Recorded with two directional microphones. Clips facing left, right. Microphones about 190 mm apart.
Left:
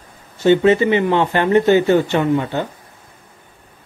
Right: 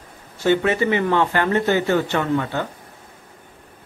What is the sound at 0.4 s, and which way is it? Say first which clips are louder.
Speech: left 6 dB; 20° left (ahead or behind).